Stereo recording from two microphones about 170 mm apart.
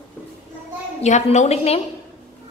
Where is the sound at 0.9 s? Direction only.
45° left (ahead or behind).